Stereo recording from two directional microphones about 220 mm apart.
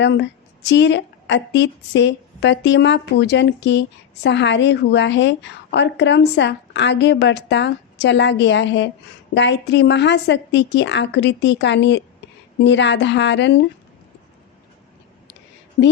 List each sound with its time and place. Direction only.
0.0 s a woman's voice: 50° left (ahead or behind)